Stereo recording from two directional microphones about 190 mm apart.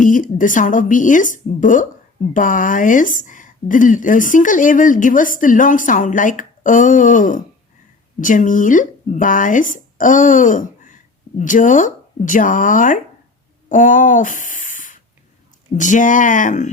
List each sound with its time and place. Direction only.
0.0 s a woman's voice: 45° left (ahead or behind)